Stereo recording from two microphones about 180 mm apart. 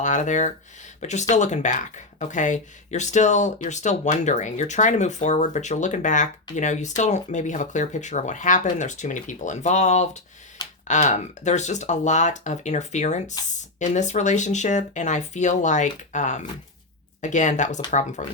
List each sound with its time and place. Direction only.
0.0 s speech: 45° left (ahead or behind)